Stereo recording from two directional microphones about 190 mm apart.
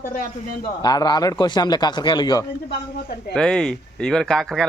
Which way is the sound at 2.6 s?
60° left (ahead or behind).